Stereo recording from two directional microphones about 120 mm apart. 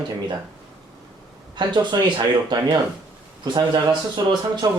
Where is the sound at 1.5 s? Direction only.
40° right (ahead or behind).